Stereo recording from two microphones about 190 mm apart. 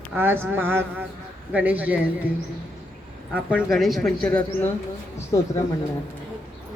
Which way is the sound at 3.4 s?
5° right (ahead or behind).